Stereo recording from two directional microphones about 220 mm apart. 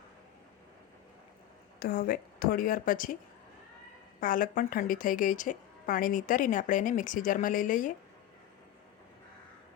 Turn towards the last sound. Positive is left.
turn(degrees=35)  # may be behind; listen again after turning